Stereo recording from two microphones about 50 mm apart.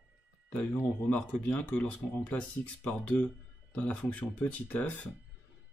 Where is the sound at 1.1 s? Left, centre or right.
Left.